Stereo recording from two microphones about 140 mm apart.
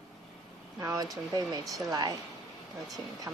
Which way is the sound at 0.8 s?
25° right (ahead or behind).